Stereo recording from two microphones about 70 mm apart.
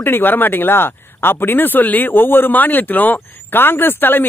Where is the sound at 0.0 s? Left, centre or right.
Left.